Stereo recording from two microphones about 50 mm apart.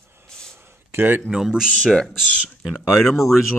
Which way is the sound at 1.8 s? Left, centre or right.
Centre.